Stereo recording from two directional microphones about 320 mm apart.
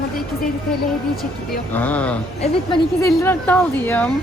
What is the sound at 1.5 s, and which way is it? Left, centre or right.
A woman's voice, centre.